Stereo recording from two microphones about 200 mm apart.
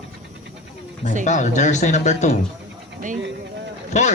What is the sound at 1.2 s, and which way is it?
Speech, 35° left (ahead or behind).